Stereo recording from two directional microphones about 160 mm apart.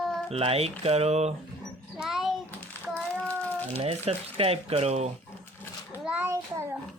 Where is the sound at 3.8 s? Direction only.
40° right (ahead or behind).